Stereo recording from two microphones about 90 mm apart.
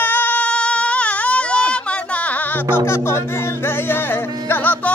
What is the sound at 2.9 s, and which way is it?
Music, 30° left (ahead or behind).